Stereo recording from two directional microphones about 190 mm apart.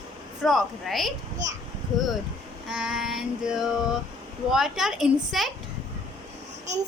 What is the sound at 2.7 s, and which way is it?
Child singing, 5° right (ahead or behind).